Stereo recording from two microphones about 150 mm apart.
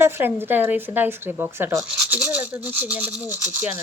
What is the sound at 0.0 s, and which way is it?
Speech, 15° right (ahead or behind).